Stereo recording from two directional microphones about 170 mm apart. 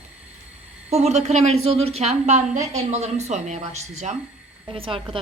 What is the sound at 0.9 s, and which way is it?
A woman's voice, 40° right (ahead or behind).